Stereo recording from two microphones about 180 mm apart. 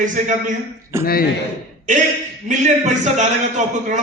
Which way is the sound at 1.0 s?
55° left (ahead or behind).